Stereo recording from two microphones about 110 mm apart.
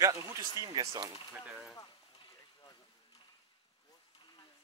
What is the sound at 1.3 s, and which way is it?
Speech, 10° right (ahead or behind).